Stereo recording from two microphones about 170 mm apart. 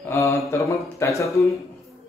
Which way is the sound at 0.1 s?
15° left (ahead or behind).